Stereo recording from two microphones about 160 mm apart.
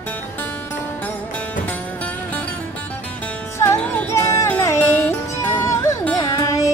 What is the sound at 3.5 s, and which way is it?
Music, 15° left (ahead or behind).